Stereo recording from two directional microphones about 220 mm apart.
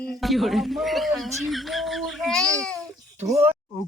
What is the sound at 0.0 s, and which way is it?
Speech, centre (ahead or behind).